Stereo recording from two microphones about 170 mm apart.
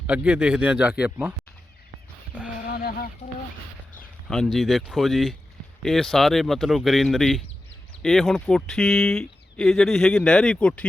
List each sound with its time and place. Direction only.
0.1 s speech: 5° right (ahead or behind)
2.6 s a sound: 65° left (ahead or behind)
4.3 s speech: 5° left (ahead or behind)